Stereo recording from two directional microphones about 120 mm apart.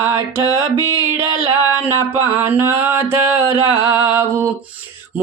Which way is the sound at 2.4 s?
20° right (ahead or behind).